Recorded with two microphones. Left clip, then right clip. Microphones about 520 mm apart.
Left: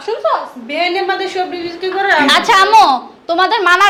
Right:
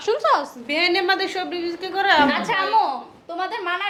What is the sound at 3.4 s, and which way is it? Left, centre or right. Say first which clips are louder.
Speech: left 15 dB; left.